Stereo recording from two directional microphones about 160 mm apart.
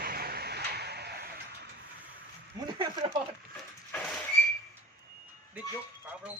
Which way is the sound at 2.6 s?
30° right (ahead or behind).